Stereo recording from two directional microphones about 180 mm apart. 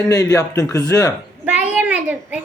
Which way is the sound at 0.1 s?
20° left (ahead or behind).